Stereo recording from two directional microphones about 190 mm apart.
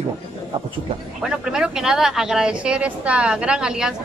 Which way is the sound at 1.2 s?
5° right (ahead or behind).